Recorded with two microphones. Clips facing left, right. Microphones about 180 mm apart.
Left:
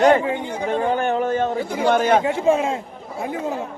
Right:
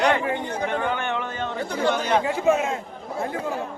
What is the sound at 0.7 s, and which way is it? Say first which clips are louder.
Speech: left 9 dB; 35° left (ahead or behind).